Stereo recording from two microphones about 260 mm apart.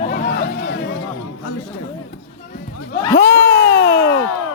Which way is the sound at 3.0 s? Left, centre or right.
Centre.